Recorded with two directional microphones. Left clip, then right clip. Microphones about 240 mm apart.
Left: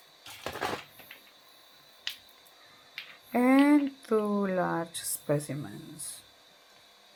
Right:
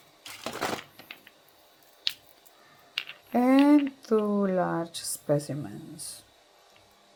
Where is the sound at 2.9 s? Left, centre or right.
Centre.